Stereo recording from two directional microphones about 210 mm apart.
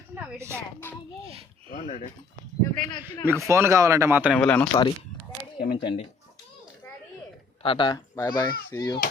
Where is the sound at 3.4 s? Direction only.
15° right (ahead or behind).